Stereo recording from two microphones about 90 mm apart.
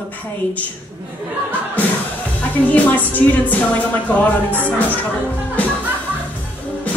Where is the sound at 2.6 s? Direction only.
15° left (ahead or behind).